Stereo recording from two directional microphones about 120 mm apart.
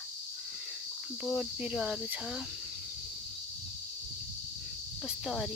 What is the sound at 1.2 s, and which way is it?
Cricket, 5° right (ahead or behind).